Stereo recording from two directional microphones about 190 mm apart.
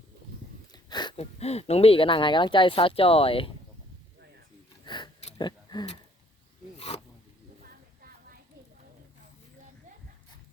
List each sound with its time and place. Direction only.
0.7 s speech: 20° left (ahead or behind)
4.9 s a sound: 25° left (ahead or behind)
6.7 s zipper: 35° left (ahead or behind)